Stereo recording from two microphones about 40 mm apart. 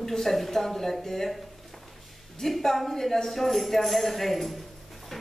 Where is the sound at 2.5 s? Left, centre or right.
Centre.